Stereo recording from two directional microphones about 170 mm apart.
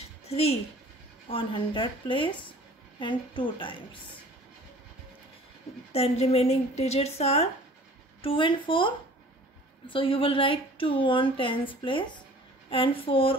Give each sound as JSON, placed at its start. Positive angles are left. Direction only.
{"t": 1.3, "sound": "a woman's voice", "side_deg": 30}
{"t": 5.9, "sound": "a woman's voice", "side_deg": 35}